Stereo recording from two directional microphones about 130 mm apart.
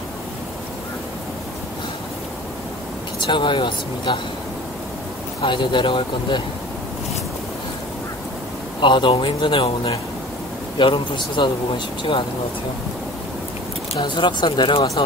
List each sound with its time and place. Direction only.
3.2 s speech: 40° left (ahead or behind)
5.4 s speech: 40° left (ahead or behind)
8.8 s speech: 40° left (ahead or behind)
14.0 s speech: 35° left (ahead or behind)